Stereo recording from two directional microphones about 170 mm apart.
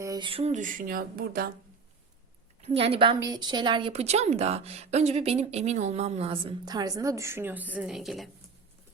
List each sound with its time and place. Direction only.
0.0 s speech: 25° right (ahead or behind); by 1.5 s 60° right (ahead or behind)
2.6 s a woman's voice: 35° right (ahead or behind)
3.2 s a woman's voice: 25° right (ahead or behind); by 8.3 s centre (ahead or behind)